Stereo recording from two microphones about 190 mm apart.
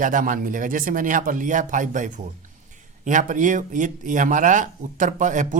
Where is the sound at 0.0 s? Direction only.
45° right (ahead or behind).